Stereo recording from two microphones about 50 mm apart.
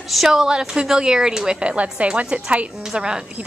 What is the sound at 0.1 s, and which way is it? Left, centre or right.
A woman's voice, centre.